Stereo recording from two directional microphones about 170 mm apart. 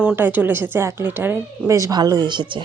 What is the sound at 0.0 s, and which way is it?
A woman's voice, 10° right (ahead or behind).